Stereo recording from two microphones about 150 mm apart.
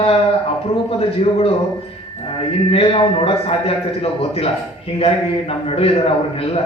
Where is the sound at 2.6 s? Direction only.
40° left (ahead or behind).